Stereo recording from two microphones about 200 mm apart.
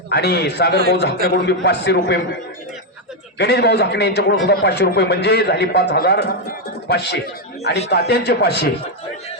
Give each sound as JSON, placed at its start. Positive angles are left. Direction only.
{"t": 0.1, "sound": "a man's voice", "side_deg": 55}
{"t": 3.3, "sound": "a man's voice", "side_deg": 55}